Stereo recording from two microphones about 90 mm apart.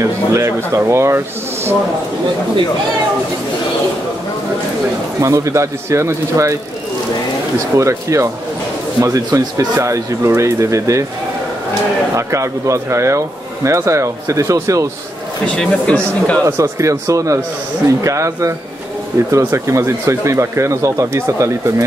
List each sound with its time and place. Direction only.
0.0 s speech: 30° right (ahead or behind)
5.2 s speech: 35° right (ahead or behind)
7.7 s speech: 35° right (ahead or behind)
12.2 s speech: 35° right (ahead or behind)
15.4 s speech: 15° left (ahead or behind)
16.4 s speech: 35° right (ahead or behind)